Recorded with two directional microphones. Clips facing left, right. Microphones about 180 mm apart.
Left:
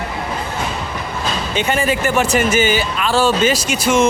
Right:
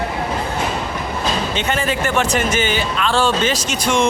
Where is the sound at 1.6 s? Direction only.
10° left (ahead or behind).